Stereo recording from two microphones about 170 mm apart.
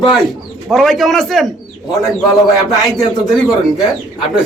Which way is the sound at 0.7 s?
Centre (ahead or behind).